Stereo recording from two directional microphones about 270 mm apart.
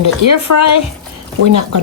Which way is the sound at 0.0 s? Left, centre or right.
Left.